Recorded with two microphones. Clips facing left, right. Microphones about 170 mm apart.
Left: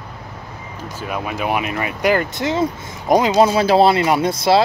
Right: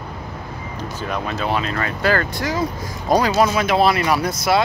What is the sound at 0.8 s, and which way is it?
Speech, 5° left (ahead or behind).